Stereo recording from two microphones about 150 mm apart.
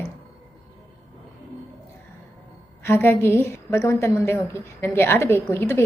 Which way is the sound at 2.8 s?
15° left (ahead or behind).